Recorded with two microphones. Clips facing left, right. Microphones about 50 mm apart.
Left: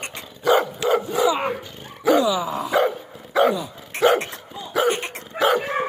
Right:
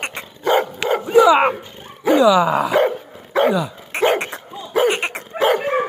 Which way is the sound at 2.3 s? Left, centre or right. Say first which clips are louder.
Right 9 dB; right.